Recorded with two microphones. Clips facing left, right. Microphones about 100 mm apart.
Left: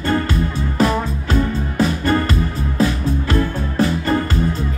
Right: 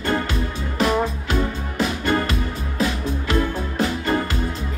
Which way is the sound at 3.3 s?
40° left (ahead or behind).